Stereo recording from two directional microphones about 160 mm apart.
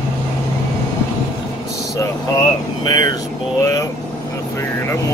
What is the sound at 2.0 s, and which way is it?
Speech, 25° left (ahead or behind).